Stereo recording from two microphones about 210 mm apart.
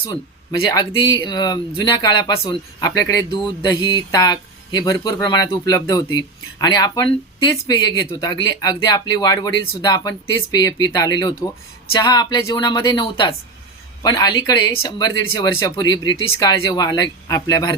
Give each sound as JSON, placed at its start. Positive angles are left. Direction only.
{"t": 0.7, "sound": "a man's voice", "side_deg": 20}